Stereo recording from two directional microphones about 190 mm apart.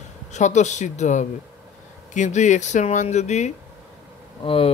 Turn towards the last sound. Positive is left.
turn(degrees=30)  # may be behind; listen again after turning